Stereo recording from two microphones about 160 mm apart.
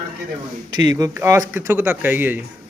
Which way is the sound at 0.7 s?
25° right (ahead or behind).